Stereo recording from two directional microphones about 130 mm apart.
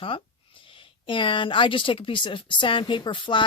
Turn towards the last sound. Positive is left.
turn(degrees=40)  # may be behind; listen again after turning